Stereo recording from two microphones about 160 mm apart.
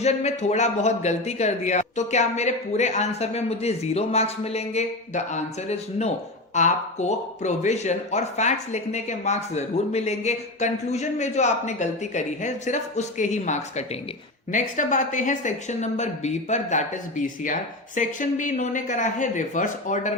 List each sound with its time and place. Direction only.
0.0 s a man's voice: 45° left (ahead or behind)